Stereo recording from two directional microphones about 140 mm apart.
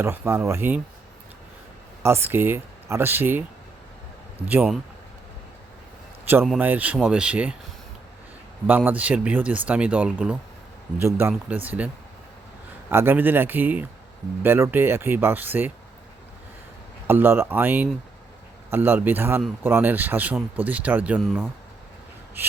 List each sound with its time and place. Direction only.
0.0 s speech: 15° right (ahead or behind)
2.0 s speech: 20° right (ahead or behind)
4.4 s speech: 10° right (ahead or behind)
6.6 s speech: 10° right (ahead or behind)
8.6 s speech: 10° right (ahead or behind)
12.9 s speech: 15° right (ahead or behind)
17.1 s speech: 15° right (ahead or behind)
22.4 s speech: 15° right (ahead or behind)